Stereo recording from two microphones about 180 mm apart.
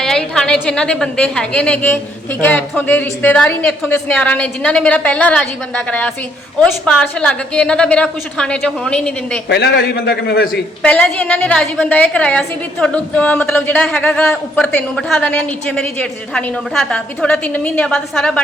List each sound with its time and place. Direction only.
0.0 s a woman's voice: 5° left (ahead or behind)
9.5 s a man's voice: 60° left (ahead or behind)
10.8 s a woman's voice: 5° left (ahead or behind)